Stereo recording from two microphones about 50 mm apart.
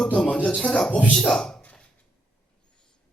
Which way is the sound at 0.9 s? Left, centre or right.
Left.